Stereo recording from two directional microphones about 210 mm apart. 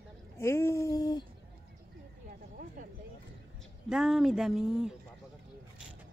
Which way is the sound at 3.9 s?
Centre (ahead or behind).